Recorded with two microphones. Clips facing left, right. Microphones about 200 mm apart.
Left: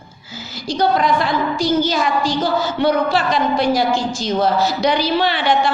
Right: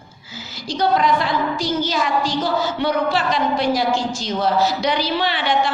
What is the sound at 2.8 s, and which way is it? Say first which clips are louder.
A woman's voice: left 6 dB; 45° left (ahead or behind).